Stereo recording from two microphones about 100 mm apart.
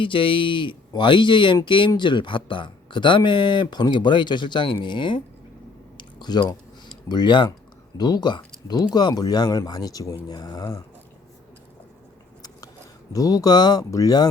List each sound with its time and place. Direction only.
0.0 s speech: 60° left (ahead or behind)
6.0 s chewing: 45° left (ahead or behind)
7.1 s speech: 50° left (ahead or behind); by 10.8 s 30° left (ahead or behind)
13.1 s speech: 35° left (ahead or behind)